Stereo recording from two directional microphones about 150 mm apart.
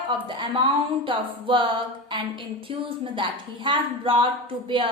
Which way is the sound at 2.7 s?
35° right (ahead or behind).